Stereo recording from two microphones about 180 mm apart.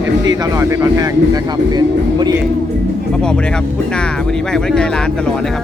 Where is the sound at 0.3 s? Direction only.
20° right (ahead or behind).